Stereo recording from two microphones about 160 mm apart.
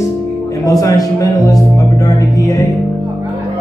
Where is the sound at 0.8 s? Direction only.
20° left (ahead or behind).